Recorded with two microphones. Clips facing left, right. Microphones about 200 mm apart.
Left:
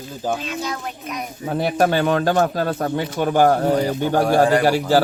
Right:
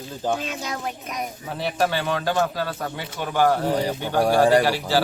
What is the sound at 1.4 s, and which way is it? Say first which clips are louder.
Speech: left 6 dB; 50° left (ahead or behind).